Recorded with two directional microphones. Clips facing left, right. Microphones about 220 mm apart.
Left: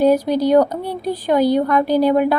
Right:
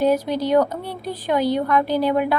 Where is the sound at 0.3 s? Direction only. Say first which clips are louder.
Left 4 dB; 40° left (ahead or behind).